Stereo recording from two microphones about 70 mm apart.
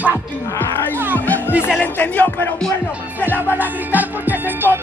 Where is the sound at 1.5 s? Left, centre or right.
Centre.